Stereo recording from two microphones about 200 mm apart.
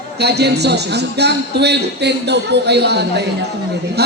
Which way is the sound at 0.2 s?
55° right (ahead or behind).